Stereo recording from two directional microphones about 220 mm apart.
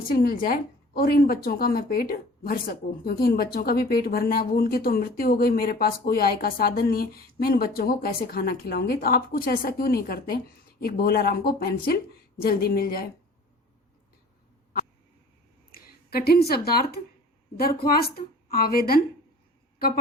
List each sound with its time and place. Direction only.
0.1 s a woman's voice: 40° left (ahead or behind)
15.7 s a sound: 45° left (ahead or behind)
16.5 s a woman's voice: 45° left (ahead or behind)